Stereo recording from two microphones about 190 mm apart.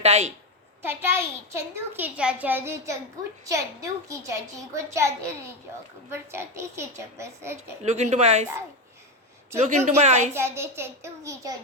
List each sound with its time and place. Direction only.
0.0 s a woman's voice: 35° right (ahead or behind)
0.8 s a child's voice: 10° right (ahead or behind)
7.9 s a woman's voice: 35° right (ahead or behind)
9.6 s a woman's voice: 35° right (ahead or behind)
10.3 s a child's voice: 15° right (ahead or behind)